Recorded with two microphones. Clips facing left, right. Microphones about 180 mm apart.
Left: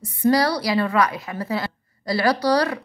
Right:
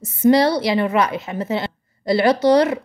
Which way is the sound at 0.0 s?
25° right (ahead or behind).